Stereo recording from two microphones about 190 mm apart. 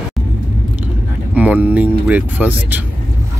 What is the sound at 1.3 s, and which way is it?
Speech, 10° right (ahead or behind).